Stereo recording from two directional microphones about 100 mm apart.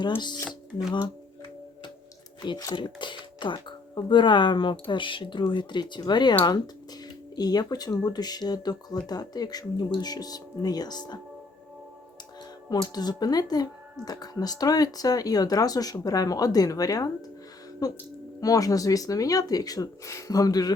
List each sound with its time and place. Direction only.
2.4 s speech: 50° left (ahead or behind)
7.3 s speech: 40° left (ahead or behind)
12.7 s speech: 40° left (ahead or behind)